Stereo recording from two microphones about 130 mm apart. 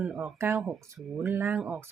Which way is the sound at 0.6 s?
5° right (ahead or behind).